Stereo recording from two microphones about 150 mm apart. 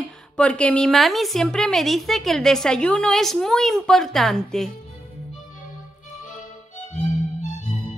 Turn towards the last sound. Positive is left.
turn(degrees=50)  # may be behind; listen again after turning